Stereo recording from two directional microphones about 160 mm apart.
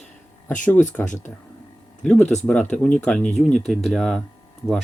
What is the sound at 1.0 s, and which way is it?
Speech, 50° left (ahead or behind).